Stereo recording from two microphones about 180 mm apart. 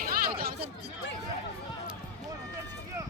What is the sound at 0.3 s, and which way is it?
Chatter, 60° right (ahead or behind).